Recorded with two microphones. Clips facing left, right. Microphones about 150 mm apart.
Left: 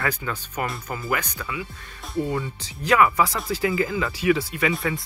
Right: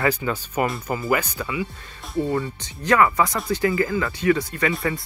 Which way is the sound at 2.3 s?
10° left (ahead or behind).